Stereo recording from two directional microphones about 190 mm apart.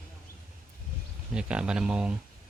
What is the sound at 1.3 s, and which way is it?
Speech, 5° right (ahead or behind).